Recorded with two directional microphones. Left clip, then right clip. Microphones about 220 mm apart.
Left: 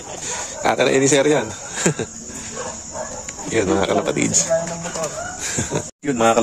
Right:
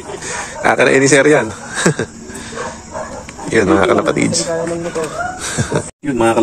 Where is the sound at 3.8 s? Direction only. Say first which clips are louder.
Right 6 dB; 10° left (ahead or behind).